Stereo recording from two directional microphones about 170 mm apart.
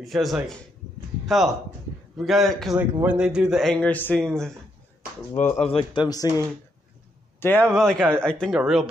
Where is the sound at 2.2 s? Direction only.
Centre (ahead or behind).